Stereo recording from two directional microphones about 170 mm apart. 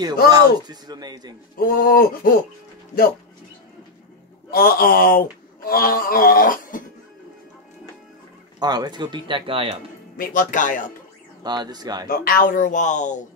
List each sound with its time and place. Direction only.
0.3 s speech: 25° right (ahead or behind)
1.6 s speech: 55° left (ahead or behind)
4.5 s speech: 60° left (ahead or behind)
8.5 s speech: 25° right (ahead or behind)
10.1 s speech: 55° left (ahead or behind)
11.4 s speech: 25° right (ahead or behind)
12.1 s speech: 55° left (ahead or behind)